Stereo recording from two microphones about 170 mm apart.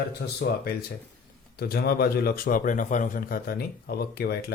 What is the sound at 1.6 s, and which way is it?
Speech, 70° left (ahead or behind).